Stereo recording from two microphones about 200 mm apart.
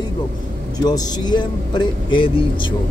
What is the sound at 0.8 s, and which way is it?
Speech, 20° left (ahead or behind).